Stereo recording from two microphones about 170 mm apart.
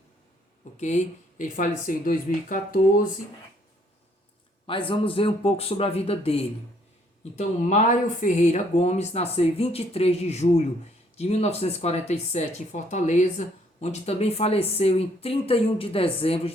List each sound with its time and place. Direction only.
0.8 s speech: 45° left (ahead or behind)
4.6 s speech: 30° left (ahead or behind)